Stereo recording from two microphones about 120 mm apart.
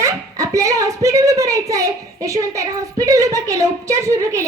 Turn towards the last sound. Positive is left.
turn(degrees=-25)  # may be behind; listen again after turning